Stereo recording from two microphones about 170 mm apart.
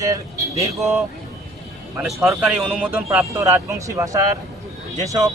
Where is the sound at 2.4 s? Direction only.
5° right (ahead or behind).